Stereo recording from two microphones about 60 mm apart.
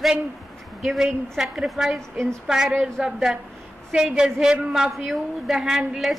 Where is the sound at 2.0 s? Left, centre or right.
Centre.